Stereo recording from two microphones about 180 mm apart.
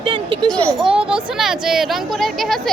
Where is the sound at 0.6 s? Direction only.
5° left (ahead or behind).